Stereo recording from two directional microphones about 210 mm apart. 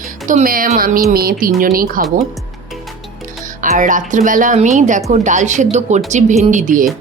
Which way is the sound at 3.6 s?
40° right (ahead or behind).